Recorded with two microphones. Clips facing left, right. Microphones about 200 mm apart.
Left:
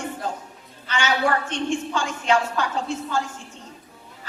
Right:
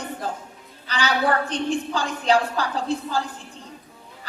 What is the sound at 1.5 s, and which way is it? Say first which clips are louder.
A woman's voice: right 1 dB; 35° right (ahead or behind).